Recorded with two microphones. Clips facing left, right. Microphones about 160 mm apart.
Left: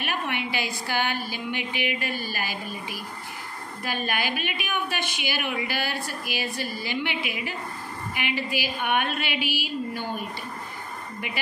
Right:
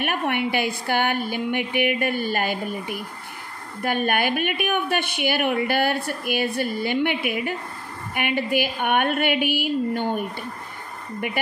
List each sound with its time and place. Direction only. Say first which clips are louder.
0.0 s a woman's voice: right 6 dB; 55° right (ahead or behind)